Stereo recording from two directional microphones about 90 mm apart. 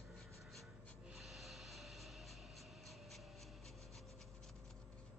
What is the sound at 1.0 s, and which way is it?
Music, centre (ahead or behind).